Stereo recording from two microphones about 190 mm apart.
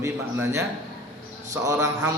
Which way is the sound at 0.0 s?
15° right (ahead or behind).